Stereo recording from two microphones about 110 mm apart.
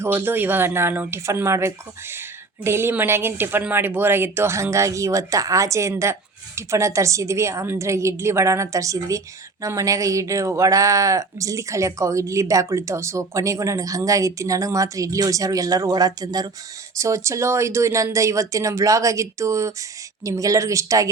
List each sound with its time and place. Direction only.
0.0 s a woman's voice: 20° right (ahead or behind)